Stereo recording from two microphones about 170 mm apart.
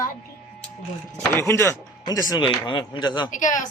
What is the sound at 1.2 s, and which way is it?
Speech, 15° left (ahead or behind).